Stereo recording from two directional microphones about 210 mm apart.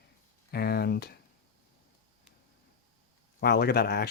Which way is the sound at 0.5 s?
50° left (ahead or behind).